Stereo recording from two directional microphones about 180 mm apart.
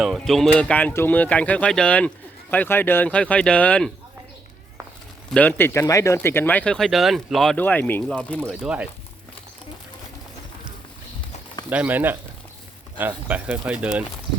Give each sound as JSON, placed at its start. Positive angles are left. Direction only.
{"t": 0.0, "sound": "speech", "side_deg": 0}
{"t": 5.3, "sound": "speech", "side_deg": 10}
{"t": 8.4, "sound": "speech", "side_deg": -5}
{"t": 11.7, "sound": "speech", "side_deg": -10}